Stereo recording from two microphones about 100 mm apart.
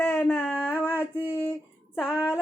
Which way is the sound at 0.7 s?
15° right (ahead or behind).